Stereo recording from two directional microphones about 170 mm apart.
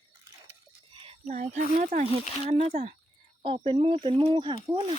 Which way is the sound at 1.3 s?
50° right (ahead or behind).